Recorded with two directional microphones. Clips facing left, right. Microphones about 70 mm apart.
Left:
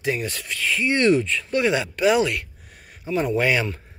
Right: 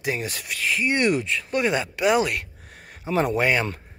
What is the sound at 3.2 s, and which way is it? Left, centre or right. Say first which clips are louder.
Speech: left 2 dB; right.